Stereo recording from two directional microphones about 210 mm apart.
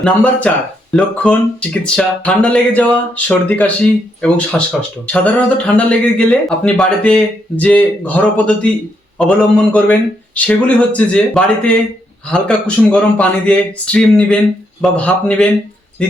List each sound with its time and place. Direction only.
0.0 s speech: 5° left (ahead or behind)